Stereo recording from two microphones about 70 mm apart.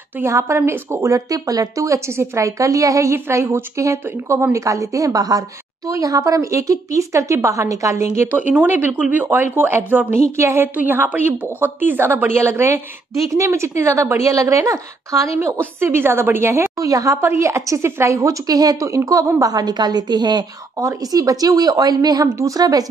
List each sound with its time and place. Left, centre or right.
0.2 s a woman's voice: right
1.1 s a woman's voice: right
8.3 s a woman's voice: right
10.8 s a woman's voice: right
15.6 s a woman's voice: right
16.7 s a woman's voice: right
20.8 s a woman's voice: right